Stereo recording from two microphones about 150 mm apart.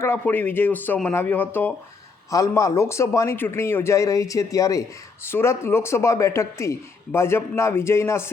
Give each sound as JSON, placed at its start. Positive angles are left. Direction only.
{"t": 0.0, "sound": "speech", "side_deg": 15}
{"t": 2.3, "sound": "speech", "side_deg": 20}